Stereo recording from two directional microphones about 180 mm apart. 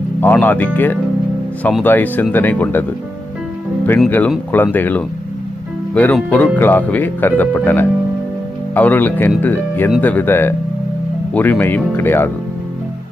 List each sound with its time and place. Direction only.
0.2 s speech: 10° left (ahead or behind)
4.3 s speech: 10° left (ahead or behind)